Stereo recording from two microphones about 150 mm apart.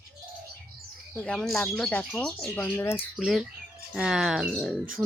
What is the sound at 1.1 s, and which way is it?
Speech, 5° left (ahead or behind).